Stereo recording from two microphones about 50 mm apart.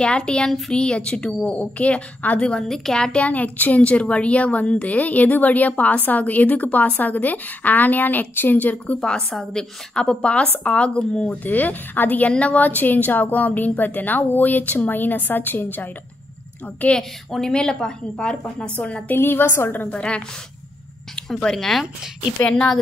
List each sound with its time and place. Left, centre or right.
0.0 s a woman's voice: centre
2.4 s a woman's voice: centre
3.0 s a woman's voice: centre
3.3 s a woman's voice: left
9.0 s a woman's voice: centre
11.4 s a woman's voice: left
12.3 s a woman's voice: left
17.3 s a woman's voice: centre
19.1 s a woman's voice: left
19.9 s a woman's voice: left
21.4 s a woman's voice: centre
22.4 s a woman's voice: left